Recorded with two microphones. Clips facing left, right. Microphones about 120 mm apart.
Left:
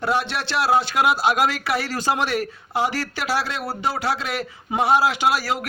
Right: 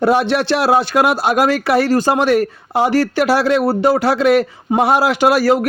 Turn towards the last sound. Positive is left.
turn(degrees=-55)  # may be behind; listen again after turning